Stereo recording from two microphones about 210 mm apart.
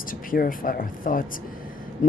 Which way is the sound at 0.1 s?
40° left (ahead or behind).